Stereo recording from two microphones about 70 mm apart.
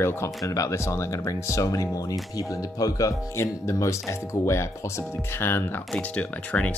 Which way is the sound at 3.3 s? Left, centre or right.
Left.